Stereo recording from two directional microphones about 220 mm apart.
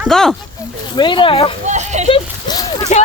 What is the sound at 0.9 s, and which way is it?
Speech, 20° left (ahead or behind).